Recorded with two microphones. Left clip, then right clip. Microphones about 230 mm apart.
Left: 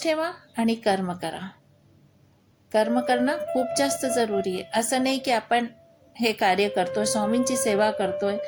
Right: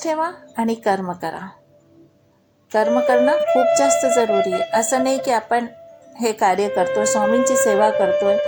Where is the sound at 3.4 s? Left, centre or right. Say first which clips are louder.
Right 10 dB; right.